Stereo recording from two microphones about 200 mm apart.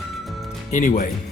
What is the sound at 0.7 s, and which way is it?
Speech, 40° left (ahead or behind).